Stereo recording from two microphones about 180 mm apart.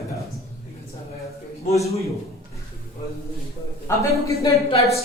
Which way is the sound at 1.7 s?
15° left (ahead or behind).